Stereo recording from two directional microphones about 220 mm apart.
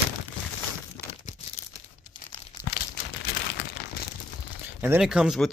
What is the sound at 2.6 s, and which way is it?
Crumpling, 20° left (ahead or behind).